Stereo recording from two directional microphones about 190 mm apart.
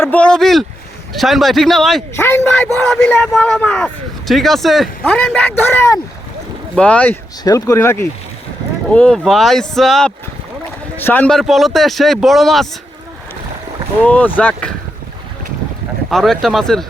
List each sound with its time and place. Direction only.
0.0 s a man's voice: 5° left (ahead or behind)
2.1 s a man's voice: 10° left (ahead or behind)
7.4 s a man's voice: 20° left (ahead or behind); by 12.6 s centre (ahead or behind)
14.0 s speech: 10° left (ahead or behind)
16.0 s a man's voice: centre (ahead or behind)